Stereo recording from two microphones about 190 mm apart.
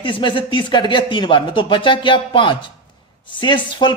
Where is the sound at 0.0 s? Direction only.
25° left (ahead or behind).